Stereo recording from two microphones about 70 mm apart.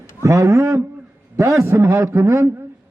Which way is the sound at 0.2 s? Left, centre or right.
Right.